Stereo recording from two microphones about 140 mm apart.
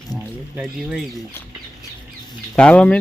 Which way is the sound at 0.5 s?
5° right (ahead or behind).